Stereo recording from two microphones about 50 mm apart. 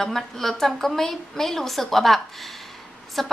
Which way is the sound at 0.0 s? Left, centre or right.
Centre.